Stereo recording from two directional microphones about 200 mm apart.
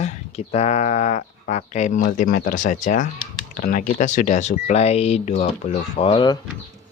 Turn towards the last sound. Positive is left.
turn(degrees=25)  # may be behind; listen again after turning